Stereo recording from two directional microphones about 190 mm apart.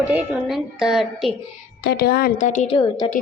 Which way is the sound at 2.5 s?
35° left (ahead or behind).